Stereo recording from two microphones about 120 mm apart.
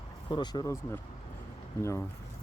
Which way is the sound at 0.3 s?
40° left (ahead or behind).